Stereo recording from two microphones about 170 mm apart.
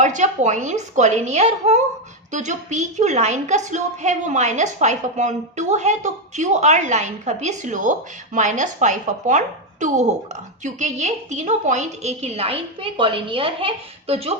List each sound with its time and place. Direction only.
0.0 s a woman's voice: 45° right (ahead or behind)